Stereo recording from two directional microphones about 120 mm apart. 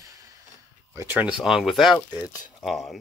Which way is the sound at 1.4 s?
Centre (ahead or behind).